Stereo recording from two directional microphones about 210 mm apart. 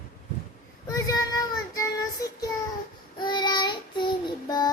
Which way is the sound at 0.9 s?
15° left (ahead or behind).